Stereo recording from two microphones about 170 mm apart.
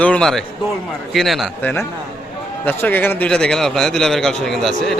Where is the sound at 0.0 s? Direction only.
5° left (ahead or behind).